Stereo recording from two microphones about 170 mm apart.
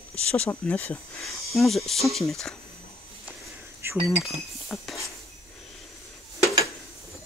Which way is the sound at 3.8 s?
15° right (ahead or behind).